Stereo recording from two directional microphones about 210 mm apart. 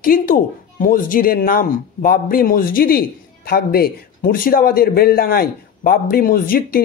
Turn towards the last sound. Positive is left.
turn(degrees=45)  # may be behind; listen again after turning